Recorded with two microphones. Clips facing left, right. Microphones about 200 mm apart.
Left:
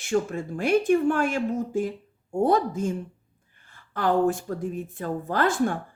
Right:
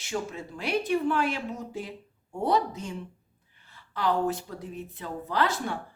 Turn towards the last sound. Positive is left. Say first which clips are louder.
# left 5 dB
turn(degrees=50)  # may be behind; listen again after turning